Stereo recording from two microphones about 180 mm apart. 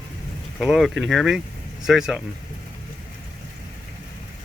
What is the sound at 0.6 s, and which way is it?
Speech, centre (ahead or behind).